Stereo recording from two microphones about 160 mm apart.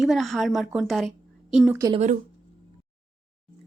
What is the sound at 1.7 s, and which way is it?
Speech, 20° right (ahead or behind).